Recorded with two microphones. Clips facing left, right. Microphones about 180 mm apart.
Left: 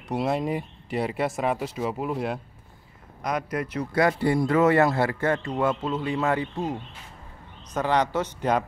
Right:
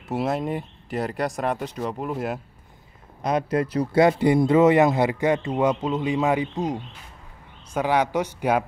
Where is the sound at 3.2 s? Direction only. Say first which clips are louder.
Right 5 dB; 25° right (ahead or behind).